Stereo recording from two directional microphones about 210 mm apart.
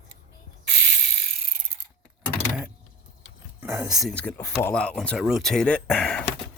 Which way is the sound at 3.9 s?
Centre (ahead or behind).